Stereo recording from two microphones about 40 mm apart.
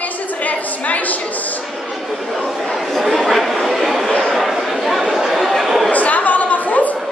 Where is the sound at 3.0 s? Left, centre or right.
Centre.